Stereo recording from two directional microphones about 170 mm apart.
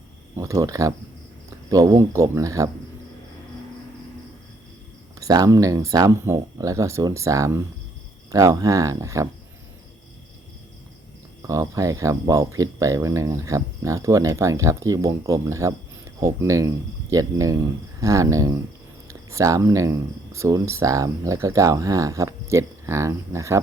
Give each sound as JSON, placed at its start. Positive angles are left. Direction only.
{"t": 0.3, "sound": "speech", "side_deg": -20}
{"t": 5.2, "sound": "speech", "side_deg": -20}
{"t": 11.4, "sound": "speech", "side_deg": -20}